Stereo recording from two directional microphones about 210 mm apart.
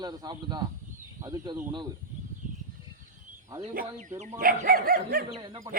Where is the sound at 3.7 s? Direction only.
40° right (ahead or behind).